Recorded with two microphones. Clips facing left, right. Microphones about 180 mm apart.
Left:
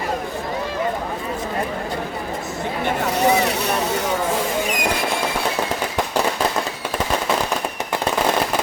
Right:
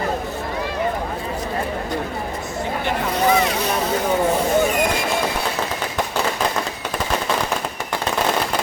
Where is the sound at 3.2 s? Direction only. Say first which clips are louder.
Even; 65° left (ahead or behind).